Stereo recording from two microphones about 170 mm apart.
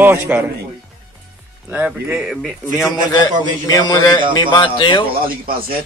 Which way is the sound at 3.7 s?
25° left (ahead or behind).